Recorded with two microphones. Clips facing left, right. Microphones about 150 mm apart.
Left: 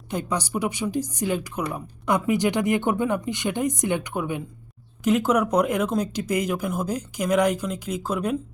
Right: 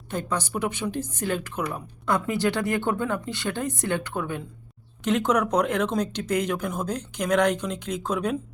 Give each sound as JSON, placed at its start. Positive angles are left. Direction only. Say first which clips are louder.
{"t": 0.1, "sound": "speech", "louder": "left 2 dB", "side_deg": 15}